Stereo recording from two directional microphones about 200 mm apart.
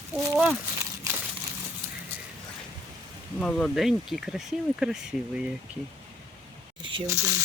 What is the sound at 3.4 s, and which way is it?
Speech, 5° left (ahead or behind).